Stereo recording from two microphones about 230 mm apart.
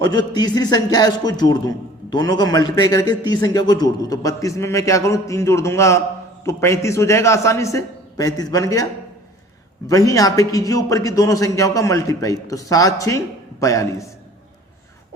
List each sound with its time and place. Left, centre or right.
0.0 s a man's voice: centre